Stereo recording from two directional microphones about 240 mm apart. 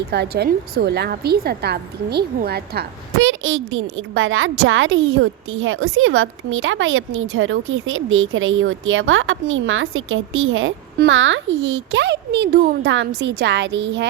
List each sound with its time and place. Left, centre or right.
0.1 s a woman's voice: right